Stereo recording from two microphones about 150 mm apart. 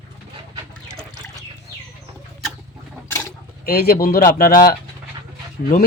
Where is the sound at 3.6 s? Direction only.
90° left; by 4.6 s 70° left (ahead or behind).